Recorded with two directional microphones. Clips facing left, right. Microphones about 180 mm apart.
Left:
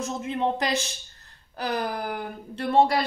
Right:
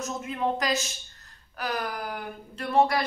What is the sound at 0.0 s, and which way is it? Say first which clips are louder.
A man's voice: left 2 dB; 25° left (ahead or behind).